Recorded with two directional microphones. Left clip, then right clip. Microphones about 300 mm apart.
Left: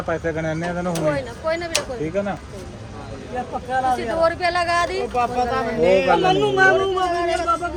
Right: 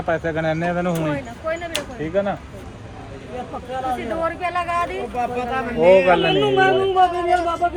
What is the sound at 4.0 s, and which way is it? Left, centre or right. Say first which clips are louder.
Speech: left 4 dB; left.